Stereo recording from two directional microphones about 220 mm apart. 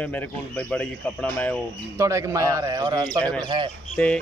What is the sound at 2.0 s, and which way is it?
A man's voice, 15° right (ahead or behind).